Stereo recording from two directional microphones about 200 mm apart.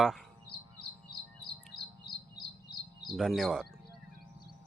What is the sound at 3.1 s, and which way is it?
Speech, centre (ahead or behind).